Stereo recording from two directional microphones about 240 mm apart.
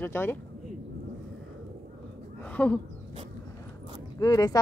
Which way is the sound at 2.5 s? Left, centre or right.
Centre.